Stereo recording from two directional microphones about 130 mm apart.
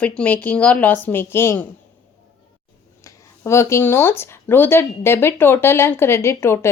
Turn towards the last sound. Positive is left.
turn(degrees=20)  # may be behind; listen again after turning